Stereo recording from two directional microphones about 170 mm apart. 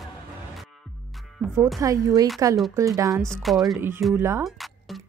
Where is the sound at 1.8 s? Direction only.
20° right (ahead or behind).